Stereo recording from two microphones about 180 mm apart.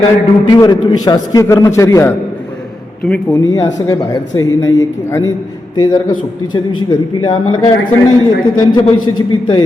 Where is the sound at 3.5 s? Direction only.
20° left (ahead or behind).